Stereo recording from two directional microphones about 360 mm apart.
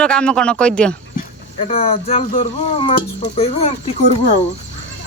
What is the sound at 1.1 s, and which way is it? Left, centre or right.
Speech, centre.